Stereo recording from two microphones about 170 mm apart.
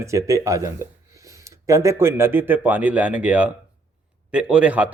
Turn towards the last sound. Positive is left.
turn(degrees=-10)  # may be behind; listen again after turning